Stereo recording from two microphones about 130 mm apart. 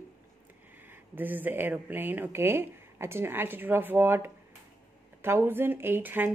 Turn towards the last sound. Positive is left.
turn(degrees=-15)  # may be behind; listen again after turning